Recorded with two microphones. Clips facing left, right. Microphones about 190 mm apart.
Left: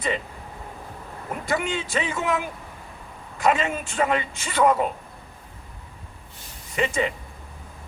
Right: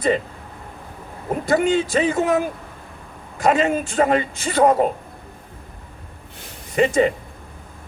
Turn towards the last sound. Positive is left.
turn(degrees=-40)  # may be behind; listen again after turning